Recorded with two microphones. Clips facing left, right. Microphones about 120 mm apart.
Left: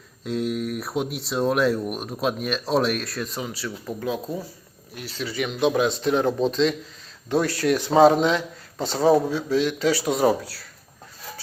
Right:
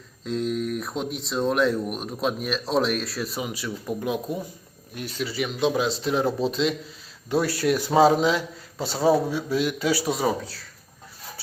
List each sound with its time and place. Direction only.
0.3 s speech: 5° left (ahead or behind); by 5.2 s 20° right (ahead or behind)
5.4 s speech: centre (ahead or behind)
10.1 s speech: centre (ahead or behind)